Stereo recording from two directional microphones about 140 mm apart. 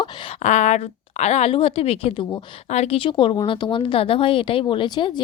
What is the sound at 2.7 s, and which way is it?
Speech, 50° left (ahead or behind).